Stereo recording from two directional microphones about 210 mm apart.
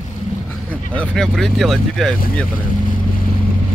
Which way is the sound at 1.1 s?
Centre (ahead or behind).